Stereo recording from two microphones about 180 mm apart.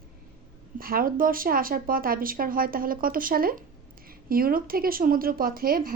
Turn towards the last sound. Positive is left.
turn(degrees=-55)  # may be behind; listen again after turning